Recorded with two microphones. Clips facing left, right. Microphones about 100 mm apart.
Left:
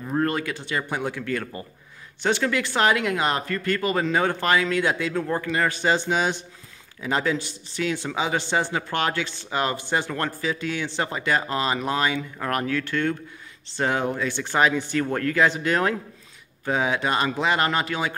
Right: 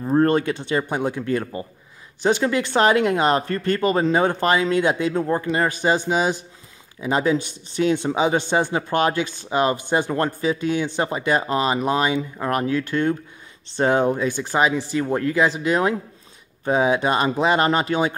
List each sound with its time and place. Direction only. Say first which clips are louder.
0.0 s speech: right 7 dB; 30° right (ahead or behind)
5.7 s speech: right 2 dB; 15° right (ahead or behind)